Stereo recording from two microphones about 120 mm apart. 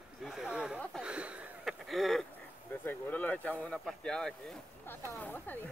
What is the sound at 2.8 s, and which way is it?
Speech, 15° left (ahead or behind).